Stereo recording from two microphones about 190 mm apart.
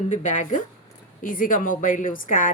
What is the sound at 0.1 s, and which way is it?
A woman's voice, 40° left (ahead or behind).